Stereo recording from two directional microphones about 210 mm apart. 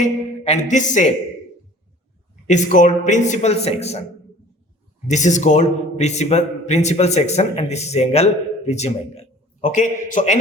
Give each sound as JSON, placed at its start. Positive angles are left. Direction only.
{"t": 0.0, "sound": "speech", "side_deg": 35}
{"t": 2.5, "sound": "a man's voice", "side_deg": 35}
{"t": 5.0, "sound": "a man's voice", "side_deg": 35}